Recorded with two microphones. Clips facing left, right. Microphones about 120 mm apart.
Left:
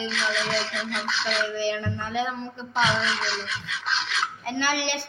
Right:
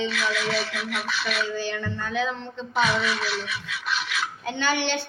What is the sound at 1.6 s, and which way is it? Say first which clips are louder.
Music: left 2 dB; 20° left (ahead or behind).